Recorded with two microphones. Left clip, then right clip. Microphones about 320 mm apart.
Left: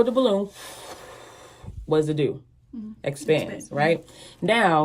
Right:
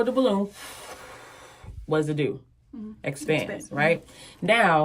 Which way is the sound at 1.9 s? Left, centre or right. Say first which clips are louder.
Left 3 dB; left.